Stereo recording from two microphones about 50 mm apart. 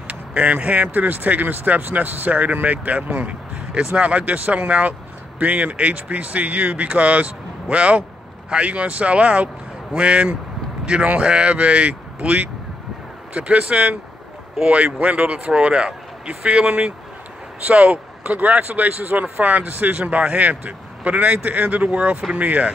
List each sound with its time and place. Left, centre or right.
0.1 s speech: right